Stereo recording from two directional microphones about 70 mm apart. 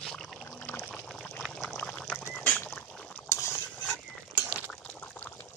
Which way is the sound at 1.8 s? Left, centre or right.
Centre.